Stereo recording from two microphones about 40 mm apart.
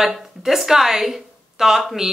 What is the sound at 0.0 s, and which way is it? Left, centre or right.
Speech, centre.